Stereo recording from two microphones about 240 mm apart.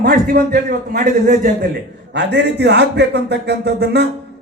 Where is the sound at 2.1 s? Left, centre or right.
Right.